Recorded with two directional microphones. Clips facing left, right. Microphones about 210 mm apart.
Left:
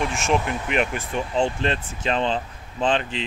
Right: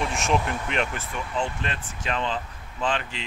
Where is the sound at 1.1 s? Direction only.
30° left (ahead or behind).